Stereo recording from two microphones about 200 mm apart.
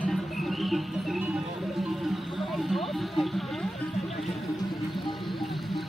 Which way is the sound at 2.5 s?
Centre (ahead or behind).